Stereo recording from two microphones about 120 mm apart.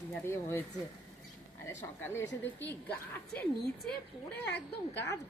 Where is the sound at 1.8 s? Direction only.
20° left (ahead or behind).